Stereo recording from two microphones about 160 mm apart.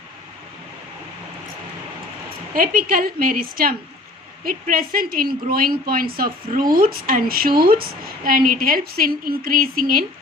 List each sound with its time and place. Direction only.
2.6 s a woman's voice: 60° right (ahead or behind)